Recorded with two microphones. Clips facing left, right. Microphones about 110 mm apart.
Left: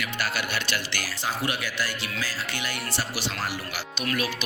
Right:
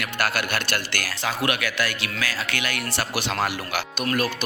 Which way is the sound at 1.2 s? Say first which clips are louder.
Right 4 dB; 75° right (ahead or behind).